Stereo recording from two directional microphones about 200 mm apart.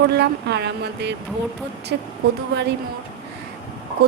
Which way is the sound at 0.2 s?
55° right (ahead or behind).